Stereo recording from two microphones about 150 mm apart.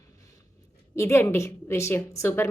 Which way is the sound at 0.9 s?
20° left (ahead or behind).